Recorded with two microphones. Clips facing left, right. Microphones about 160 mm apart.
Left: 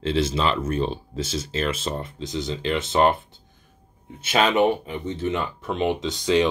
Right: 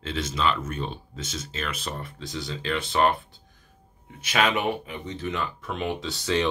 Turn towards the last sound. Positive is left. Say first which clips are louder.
# left 5 dB
turn(degrees=15)  # may be behind; listen again after turning